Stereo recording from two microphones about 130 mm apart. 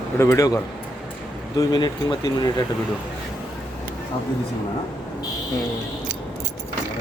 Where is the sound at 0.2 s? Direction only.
25° left (ahead or behind).